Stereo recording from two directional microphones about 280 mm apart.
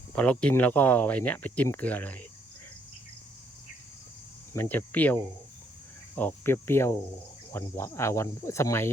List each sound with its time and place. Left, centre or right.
0.2 s speech: centre
4.5 s speech: centre
6.1 s cricket: centre